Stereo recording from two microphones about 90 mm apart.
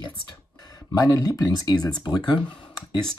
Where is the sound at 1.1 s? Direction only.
40° left (ahead or behind).